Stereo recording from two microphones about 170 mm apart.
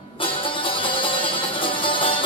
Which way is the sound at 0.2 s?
30° left (ahead or behind).